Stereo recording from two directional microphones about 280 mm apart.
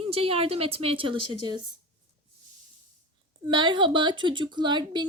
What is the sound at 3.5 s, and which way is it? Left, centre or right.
A woman's voice, centre.